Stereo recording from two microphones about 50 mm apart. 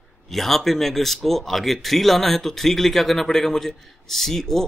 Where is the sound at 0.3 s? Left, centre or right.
Centre.